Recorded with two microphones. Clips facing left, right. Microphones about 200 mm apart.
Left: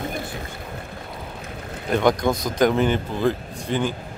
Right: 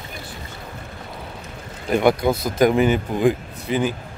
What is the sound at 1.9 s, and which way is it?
Speech, 5° right (ahead or behind).